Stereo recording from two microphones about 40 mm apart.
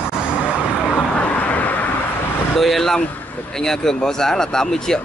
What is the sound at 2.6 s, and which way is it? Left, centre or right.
Speech, centre.